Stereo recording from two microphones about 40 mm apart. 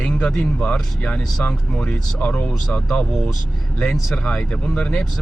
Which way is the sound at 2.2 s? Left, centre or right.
Left.